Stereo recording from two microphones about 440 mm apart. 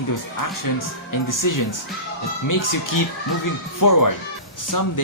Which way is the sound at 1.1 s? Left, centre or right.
Left.